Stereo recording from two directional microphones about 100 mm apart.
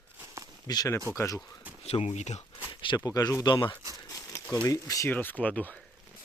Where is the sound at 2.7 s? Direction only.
55° left (ahead or behind).